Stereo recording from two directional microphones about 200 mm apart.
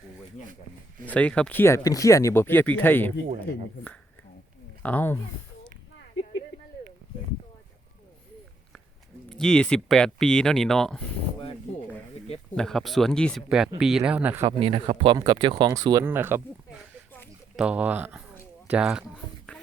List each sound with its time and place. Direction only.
1.0 s speech: 5° left (ahead or behind)
4.8 s speech: 10° left (ahead or behind)
9.3 s speech: 5° left (ahead or behind)
12.5 s speech: centre (ahead or behind)
14.4 s speech: 25° right (ahead or behind); by 16.4 s 10° right (ahead or behind)
17.6 s speech: 5° right (ahead or behind)